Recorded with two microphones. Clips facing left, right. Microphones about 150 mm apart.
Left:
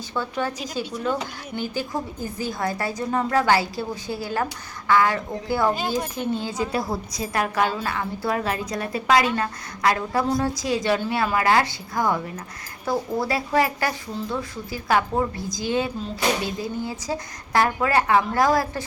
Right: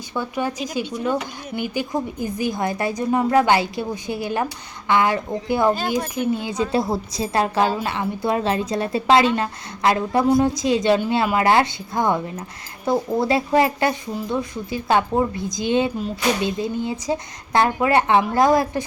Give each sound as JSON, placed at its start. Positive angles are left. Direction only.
{"t": 0.1, "sound": "speech", "side_deg": -15}